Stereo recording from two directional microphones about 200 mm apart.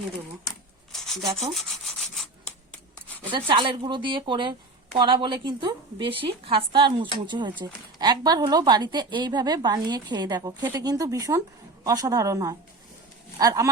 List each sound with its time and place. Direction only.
0.9 s rub: centre (ahead or behind)
3.3 s a woman's voice: 25° right (ahead or behind)
13.4 s dog: 15° right (ahead or behind)